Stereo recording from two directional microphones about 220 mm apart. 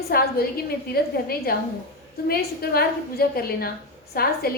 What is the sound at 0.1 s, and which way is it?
A woman's voice, 45° left (ahead or behind).